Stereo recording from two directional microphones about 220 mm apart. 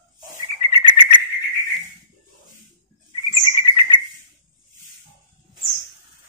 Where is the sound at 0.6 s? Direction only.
25° left (ahead or behind).